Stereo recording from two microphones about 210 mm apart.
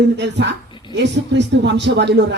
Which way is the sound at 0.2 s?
55° right (ahead or behind).